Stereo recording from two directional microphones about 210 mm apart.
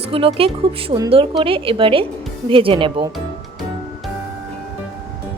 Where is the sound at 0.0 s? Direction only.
25° right (ahead or behind).